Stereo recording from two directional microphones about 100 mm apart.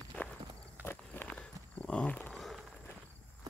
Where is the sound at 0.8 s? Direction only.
20° left (ahead or behind).